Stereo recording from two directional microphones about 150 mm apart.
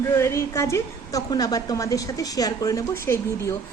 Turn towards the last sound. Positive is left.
turn(degrees=20)  # may be behind; listen again after turning